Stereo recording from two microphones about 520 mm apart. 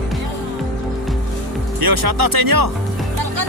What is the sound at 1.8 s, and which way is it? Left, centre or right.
Speech, right.